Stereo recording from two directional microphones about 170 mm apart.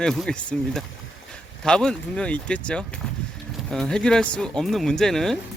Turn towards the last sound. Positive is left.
turn(degrees=0)  # may be behind; listen again after turning